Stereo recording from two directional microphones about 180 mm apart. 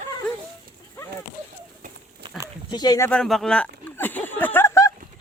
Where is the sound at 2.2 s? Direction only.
20° right (ahead or behind).